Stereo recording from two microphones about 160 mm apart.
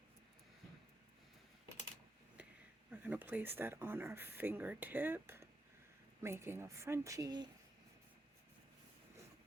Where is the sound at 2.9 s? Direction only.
10° right (ahead or behind).